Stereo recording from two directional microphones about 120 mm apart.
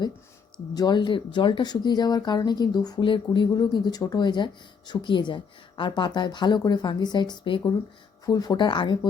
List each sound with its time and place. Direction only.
0.7 s speech: 35° left (ahead or behind)